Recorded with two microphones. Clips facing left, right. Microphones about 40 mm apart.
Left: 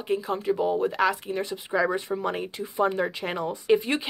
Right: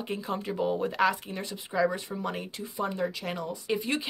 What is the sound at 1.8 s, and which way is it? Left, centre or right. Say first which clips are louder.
Speech: left 3 dB; centre.